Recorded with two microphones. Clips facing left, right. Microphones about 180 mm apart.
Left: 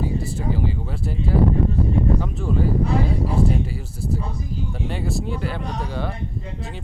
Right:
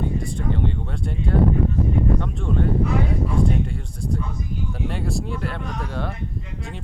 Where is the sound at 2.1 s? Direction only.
5° left (ahead or behind).